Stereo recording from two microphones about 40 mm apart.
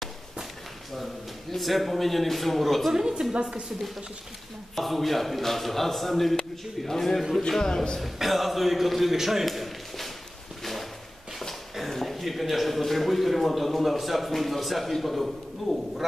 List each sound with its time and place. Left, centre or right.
1.5 s a man's voice: centre
2.9 s a woman's voice: centre
3.3 s speech: right
4.7 s a man's voice: centre
8.0 s a man's voice: centre
10.6 s a sound: centre
11.9 s a man's voice: centre